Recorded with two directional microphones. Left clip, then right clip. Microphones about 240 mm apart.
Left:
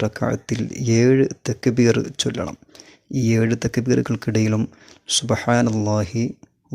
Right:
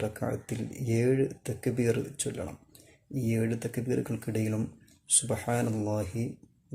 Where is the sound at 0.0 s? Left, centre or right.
Left.